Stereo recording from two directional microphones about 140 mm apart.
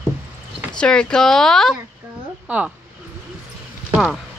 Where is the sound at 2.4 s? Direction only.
10° right (ahead or behind).